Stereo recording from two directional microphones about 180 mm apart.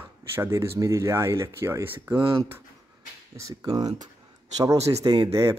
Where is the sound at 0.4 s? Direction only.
15° right (ahead or behind).